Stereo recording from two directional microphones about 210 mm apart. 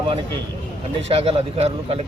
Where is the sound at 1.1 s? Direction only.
30° right (ahead or behind).